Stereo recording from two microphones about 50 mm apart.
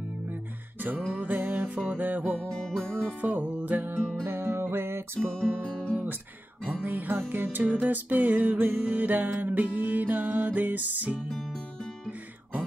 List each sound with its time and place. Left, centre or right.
0.3 s music: right
2.5 s music: centre
3.2 s music: right
3.9 s music: right
5.3 s music: centre
5.6 s music: left
6.8 s music: right
11.2 s music: centre